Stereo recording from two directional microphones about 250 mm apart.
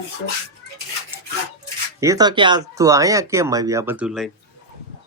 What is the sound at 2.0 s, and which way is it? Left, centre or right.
Speech, centre.